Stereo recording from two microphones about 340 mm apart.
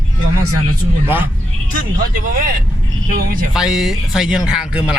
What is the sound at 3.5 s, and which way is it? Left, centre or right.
A man's voice, centre.